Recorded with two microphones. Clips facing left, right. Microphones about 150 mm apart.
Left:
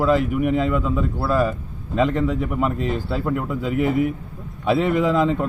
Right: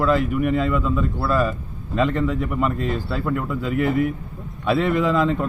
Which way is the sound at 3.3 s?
40° left (ahead or behind).